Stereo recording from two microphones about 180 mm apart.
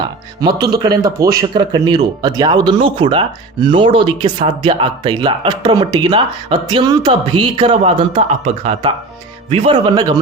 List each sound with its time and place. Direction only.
0.0 s speech: 25° right (ahead or behind)